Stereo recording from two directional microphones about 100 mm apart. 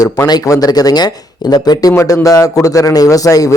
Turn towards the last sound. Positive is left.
turn(degrees=35)  # may be behind; listen again after turning